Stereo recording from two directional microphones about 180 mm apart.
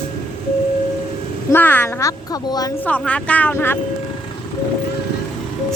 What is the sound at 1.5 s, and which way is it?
Speech, 10° left (ahead or behind).